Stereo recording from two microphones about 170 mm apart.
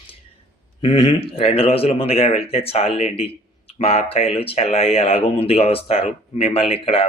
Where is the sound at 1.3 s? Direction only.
35° left (ahead or behind).